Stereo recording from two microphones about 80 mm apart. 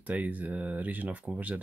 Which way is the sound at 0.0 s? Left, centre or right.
Centre.